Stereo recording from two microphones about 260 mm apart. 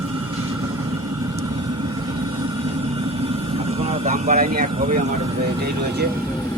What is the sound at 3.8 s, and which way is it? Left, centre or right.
Speech, right.